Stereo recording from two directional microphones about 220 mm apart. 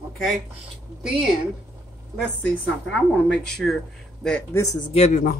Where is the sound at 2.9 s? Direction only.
5° left (ahead or behind).